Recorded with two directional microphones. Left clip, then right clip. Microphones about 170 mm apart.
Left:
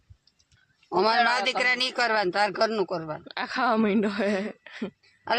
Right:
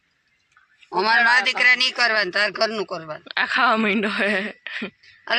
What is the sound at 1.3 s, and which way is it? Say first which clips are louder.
A man's voice: right 7 dB; 90° left.